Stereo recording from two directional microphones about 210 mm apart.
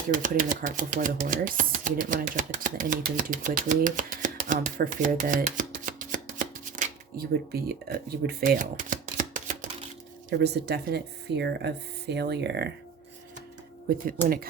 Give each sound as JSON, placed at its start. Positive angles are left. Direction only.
{"t": 0.1, "sound": "speech", "side_deg": -40}
{"t": 10.2, "sound": "speech", "side_deg": -50}
{"t": 13.9, "sound": "speech", "side_deg": -45}